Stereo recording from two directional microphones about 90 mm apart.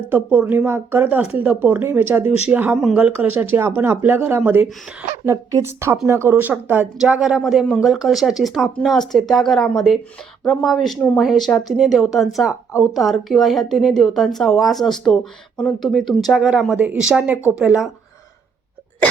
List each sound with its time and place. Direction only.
0.1 s a woman's voice: 20° right (ahead or behind)
2.7 s a woman's voice: 5° right (ahead or behind)
3.0 s a woman's voice: 15° right (ahead or behind)
5.2 s a woman's voice: 35° right (ahead or behind)
7.0 s a woman's voice: 5° right (ahead or behind)